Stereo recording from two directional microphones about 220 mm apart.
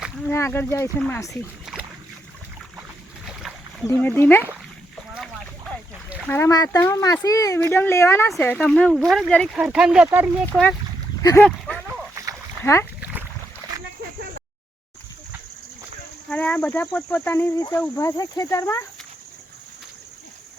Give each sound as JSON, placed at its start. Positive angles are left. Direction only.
{"t": 0.3, "sound": "speech", "side_deg": 10}
{"t": 3.8, "sound": "speech", "side_deg": 10}
{"t": 5.1, "sound": "a sound", "side_deg": 0}
{"t": 6.2, "sound": "speech", "side_deg": 10}
{"t": 11.2, "sound": "speech", "side_deg": 15}
{"t": 11.4, "sound": "a sound", "side_deg": 5}
{"t": 16.3, "sound": "speech", "side_deg": 5}